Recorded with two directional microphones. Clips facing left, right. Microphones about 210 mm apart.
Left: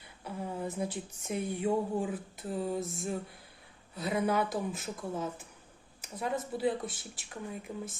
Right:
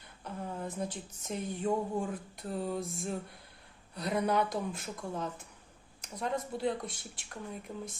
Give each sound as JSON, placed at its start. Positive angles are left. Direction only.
{"t": 0.3, "sound": "speech", "side_deg": 10}